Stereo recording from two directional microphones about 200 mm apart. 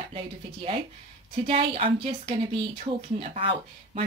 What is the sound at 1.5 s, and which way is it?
A woman's voice, 30° right (ahead or behind).